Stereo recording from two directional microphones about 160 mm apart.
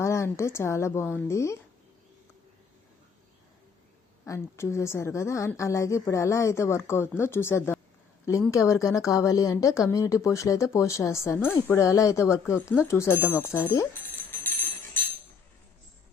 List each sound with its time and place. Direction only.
0.0 s speech: 15° left (ahead or behind)
4.3 s speech: 15° left (ahead or behind)